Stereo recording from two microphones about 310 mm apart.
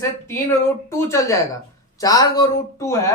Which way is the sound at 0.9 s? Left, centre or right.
Centre.